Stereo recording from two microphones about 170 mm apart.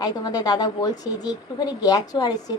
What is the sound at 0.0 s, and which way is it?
A woman's voice, 25° left (ahead or behind).